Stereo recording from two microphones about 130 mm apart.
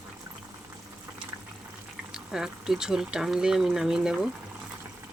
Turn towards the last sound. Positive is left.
turn(degrees=-5)  # may be behind; listen again after turning